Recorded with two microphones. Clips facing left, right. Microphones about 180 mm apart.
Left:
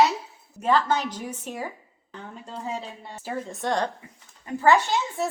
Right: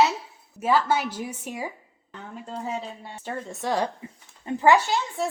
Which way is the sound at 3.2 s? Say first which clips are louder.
Left 1 dB; centre (ahead or behind).